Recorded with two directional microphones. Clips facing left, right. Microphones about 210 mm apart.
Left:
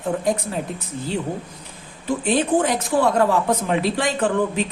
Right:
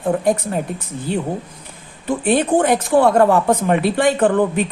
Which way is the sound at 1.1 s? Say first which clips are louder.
Right 4 dB; 55° right (ahead or behind).